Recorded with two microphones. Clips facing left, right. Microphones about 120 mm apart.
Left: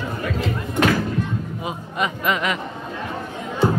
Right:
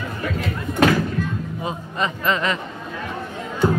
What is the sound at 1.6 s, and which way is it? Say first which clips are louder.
Speech: right 1 dB; 10° left (ahead or behind).